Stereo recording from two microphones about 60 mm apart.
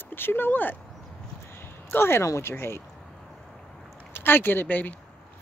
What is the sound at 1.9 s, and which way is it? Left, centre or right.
Speech, left.